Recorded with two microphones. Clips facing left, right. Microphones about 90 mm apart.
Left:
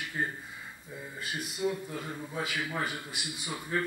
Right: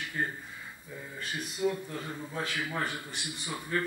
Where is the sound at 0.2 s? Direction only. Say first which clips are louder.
Even; 20° left (ahead or behind).